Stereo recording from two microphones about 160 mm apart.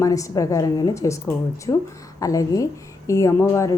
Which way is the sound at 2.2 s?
20° left (ahead or behind).